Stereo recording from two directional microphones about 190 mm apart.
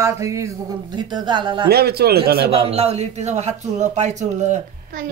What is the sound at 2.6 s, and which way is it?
Speech, 35° right (ahead or behind).